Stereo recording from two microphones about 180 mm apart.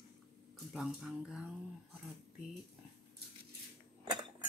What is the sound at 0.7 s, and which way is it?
Speech, centre (ahead or behind).